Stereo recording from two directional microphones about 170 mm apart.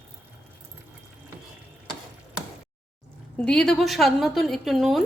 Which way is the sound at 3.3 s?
5° left (ahead or behind).